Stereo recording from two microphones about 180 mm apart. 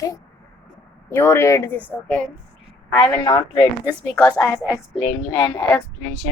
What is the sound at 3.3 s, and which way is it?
Speech, 20° left (ahead or behind).